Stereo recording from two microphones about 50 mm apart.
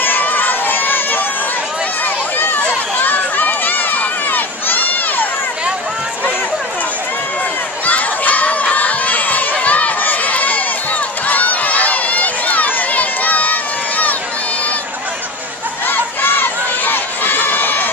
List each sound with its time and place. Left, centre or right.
0.0 s crowd: left
2.3 s run: left
7.8 s crowd: left
11.2 s run: left
15.9 s crowd: left